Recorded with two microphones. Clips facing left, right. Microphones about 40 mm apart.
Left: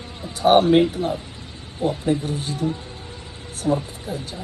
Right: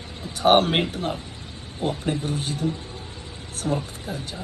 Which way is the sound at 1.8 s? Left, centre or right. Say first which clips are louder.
Left 4 dB; right.